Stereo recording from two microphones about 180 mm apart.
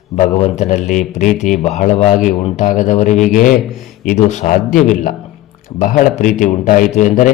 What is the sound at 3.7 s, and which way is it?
Speech, centre (ahead or behind).